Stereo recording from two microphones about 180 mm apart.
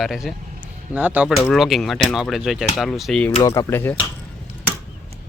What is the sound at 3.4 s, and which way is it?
Speech, 20° left (ahead or behind).